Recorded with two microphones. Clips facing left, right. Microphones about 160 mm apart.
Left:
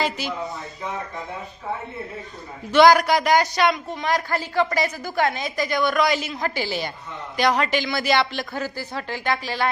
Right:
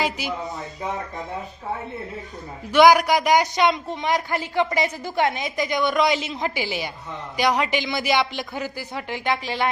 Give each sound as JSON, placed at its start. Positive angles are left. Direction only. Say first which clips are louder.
{"t": 0.0, "sound": "speech", "louder": "even", "side_deg": -15}
{"t": 2.7, "sound": "speech", "louder": "even", "side_deg": -15}